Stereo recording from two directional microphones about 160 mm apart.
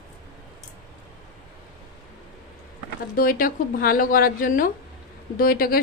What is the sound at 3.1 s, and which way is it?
Speech, 65° left (ahead or behind).